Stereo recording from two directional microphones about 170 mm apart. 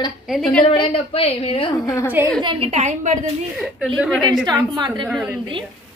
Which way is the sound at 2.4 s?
30° right (ahead or behind).